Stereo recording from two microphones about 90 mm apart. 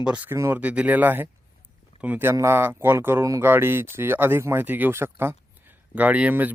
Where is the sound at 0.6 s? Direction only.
15° right (ahead or behind).